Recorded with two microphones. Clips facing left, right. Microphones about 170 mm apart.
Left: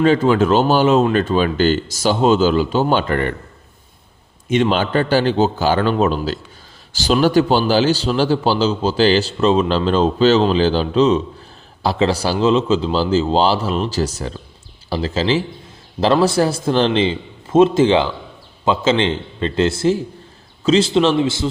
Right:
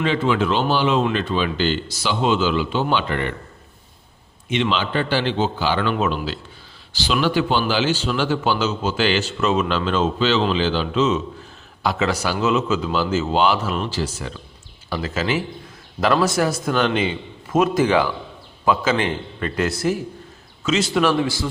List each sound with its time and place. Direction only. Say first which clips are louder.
0.0 s speech: left 6 dB; 40° left (ahead or behind)
4.4 s a man's voice: left 5 dB; 45° left (ahead or behind); by 21.5 s 25° left (ahead or behind)